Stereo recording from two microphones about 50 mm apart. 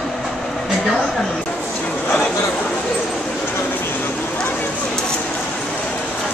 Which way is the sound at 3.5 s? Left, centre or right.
Left.